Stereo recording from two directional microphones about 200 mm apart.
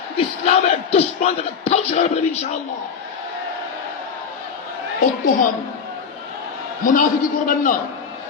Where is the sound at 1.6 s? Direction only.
35° left (ahead or behind).